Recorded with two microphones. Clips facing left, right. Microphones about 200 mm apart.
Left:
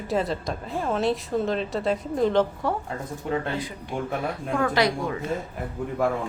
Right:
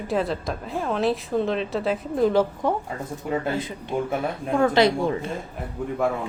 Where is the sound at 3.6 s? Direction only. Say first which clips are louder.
Right 4 dB; 25° right (ahead or behind).